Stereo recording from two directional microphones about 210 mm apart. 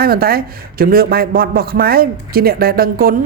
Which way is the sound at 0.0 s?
45° right (ahead or behind).